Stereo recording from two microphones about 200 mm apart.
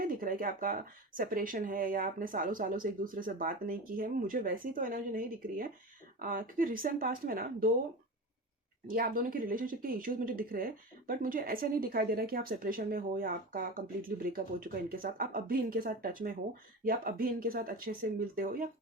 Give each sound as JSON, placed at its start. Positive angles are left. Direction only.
{"t": 0.0, "sound": "speech", "side_deg": -45}
{"t": 8.9, "sound": "speech", "side_deg": -45}